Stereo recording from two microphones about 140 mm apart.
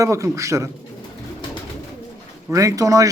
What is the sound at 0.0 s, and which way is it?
Speech, 20° right (ahead or behind).